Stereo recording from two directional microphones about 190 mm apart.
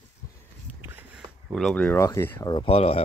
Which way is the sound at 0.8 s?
10° right (ahead or behind).